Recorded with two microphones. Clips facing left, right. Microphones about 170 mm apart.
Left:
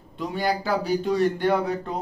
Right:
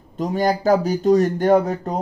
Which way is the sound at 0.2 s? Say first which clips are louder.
Right 6 dB; 45° right (ahead or behind).